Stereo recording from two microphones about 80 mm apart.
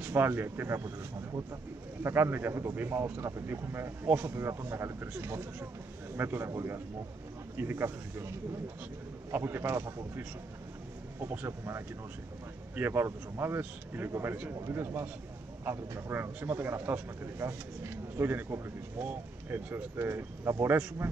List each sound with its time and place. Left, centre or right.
0.0 s a man's voice: right
9.3 s a man's voice: right
16.1 s speech: right